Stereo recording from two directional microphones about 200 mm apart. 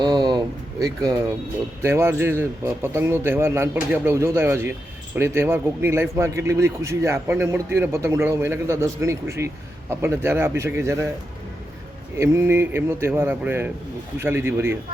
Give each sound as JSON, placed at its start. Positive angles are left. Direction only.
{"t": 0.0, "sound": "a sound", "side_deg": -20}
{"t": 1.8, "sound": "a man's voice", "side_deg": -10}
{"t": 12.1, "sound": "a man's voice", "side_deg": -15}